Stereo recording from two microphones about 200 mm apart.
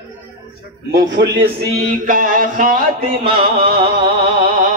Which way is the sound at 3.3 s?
25° right (ahead or behind).